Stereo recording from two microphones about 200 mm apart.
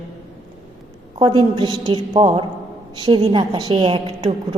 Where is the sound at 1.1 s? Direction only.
25° right (ahead or behind).